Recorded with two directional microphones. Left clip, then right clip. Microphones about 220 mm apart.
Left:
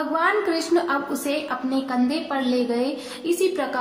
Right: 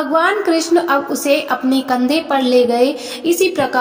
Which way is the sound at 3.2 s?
30° right (ahead or behind).